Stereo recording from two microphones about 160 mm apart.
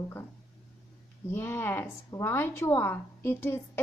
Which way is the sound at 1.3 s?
15° left (ahead or behind).